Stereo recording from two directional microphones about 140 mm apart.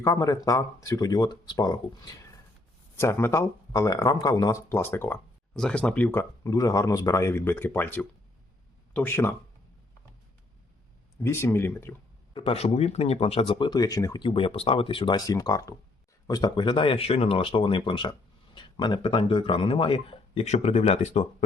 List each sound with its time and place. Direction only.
0.0 s speech: 25° left (ahead or behind)
2.9 s speech: 20° left (ahead or behind)
11.2 s speech: 15° left (ahead or behind)
12.3 s speech: 40° left (ahead or behind); by 14.3 s 25° left (ahead or behind)
14.3 s speech: 40° left (ahead or behind)
20.4 s speech: 50° left (ahead or behind)